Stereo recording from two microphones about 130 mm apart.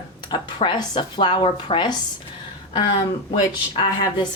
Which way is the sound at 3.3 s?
40° left (ahead or behind).